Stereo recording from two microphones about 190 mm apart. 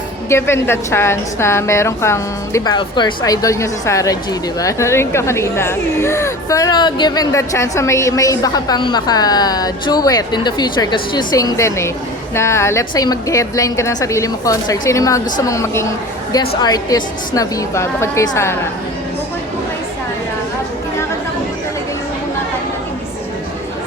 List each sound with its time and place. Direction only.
0.3 s a woman's voice: 15° left (ahead or behind)